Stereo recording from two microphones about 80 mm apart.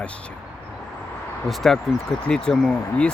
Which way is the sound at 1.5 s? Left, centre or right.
Centre.